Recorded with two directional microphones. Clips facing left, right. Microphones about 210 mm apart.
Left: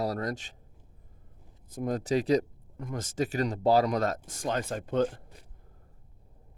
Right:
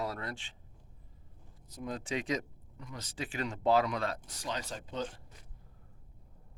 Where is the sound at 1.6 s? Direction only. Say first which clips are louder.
Left 9 dB; 50° left (ahead or behind).